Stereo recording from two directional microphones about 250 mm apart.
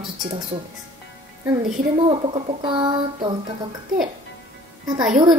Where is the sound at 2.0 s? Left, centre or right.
Right.